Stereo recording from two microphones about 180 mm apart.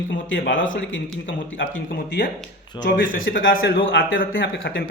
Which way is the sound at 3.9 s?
90° left.